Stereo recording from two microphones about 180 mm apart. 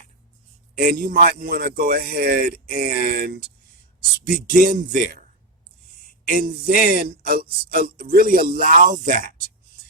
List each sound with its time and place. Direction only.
0.8 s speech: 50° right (ahead or behind)
6.2 s speech: 50° right (ahead or behind)